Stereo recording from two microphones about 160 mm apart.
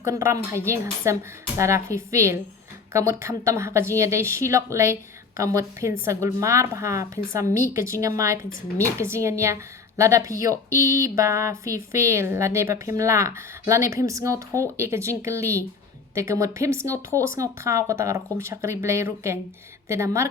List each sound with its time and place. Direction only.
0.0 s speech: 15° right (ahead or behind)